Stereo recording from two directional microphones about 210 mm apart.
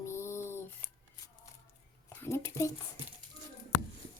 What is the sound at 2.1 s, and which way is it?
Speech, 10° left (ahead or behind).